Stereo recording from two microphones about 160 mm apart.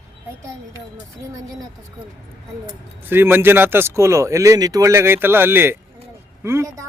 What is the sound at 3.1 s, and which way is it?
Speech, 15° right (ahead or behind).